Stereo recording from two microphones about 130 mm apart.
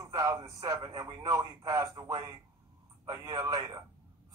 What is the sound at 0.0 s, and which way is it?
Speech, 25° right (ahead or behind).